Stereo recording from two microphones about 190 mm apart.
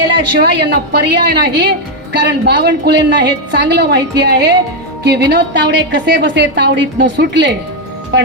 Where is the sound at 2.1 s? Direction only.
65° right (ahead or behind).